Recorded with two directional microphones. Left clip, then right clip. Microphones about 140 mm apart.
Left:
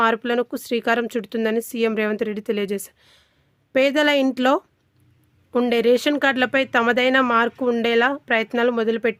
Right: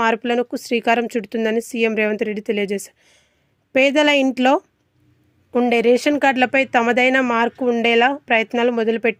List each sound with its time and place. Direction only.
0.0 s speech: 10° right (ahead or behind)